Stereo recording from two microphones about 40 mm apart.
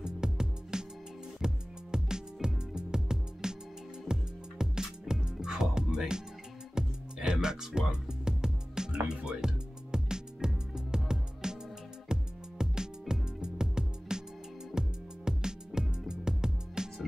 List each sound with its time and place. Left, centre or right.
0.0 s music: centre